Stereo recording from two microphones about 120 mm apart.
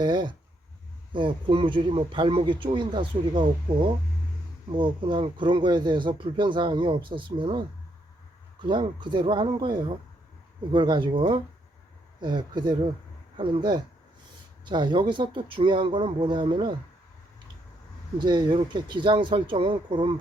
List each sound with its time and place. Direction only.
0.0 s a man's voice: 40° right (ahead or behind)
8.6 s a man's voice: 40° right (ahead or behind)
18.2 s speech: 40° right (ahead or behind)